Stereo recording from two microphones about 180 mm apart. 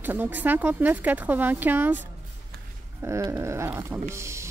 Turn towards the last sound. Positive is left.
turn(degrees=-15)  # may be behind; listen again after turning